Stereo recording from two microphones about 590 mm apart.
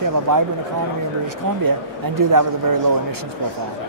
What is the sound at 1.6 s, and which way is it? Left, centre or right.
Speech, right.